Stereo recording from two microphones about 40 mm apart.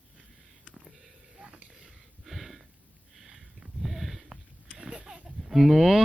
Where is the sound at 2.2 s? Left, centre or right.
Centre.